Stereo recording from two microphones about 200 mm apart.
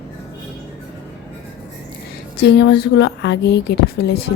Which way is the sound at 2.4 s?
60° left (ahead or behind).